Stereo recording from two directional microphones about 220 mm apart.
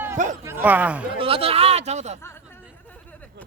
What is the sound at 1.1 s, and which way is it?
Speech, 25° right (ahead or behind).